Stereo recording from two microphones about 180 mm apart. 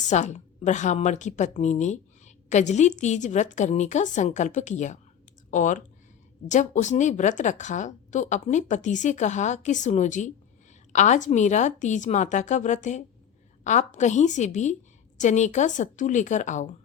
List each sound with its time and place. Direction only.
0.1 s a woman's voice: 40° left (ahead or behind)